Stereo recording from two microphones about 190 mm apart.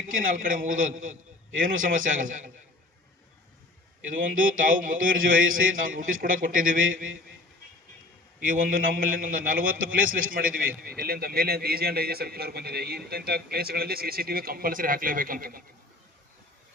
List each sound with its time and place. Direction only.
0.1 s a man's voice: 45° right (ahead or behind)
4.1 s a man's voice: 45° right (ahead or behind)
8.4 s a man's voice: 45° right (ahead or behind)